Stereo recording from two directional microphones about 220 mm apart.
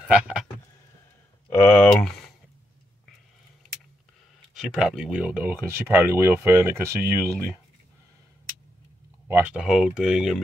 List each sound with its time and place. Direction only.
0.1 s speech: 5° right (ahead or behind)
1.5 s a sound: 10° left (ahead or behind)
4.6 s speech: centre (ahead or behind)
9.3 s speech: 5° right (ahead or behind)